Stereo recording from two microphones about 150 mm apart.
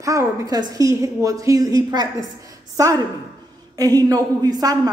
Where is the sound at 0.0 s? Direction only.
20° right (ahead or behind).